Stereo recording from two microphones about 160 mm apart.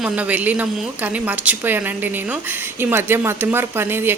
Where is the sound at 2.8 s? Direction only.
15° right (ahead or behind).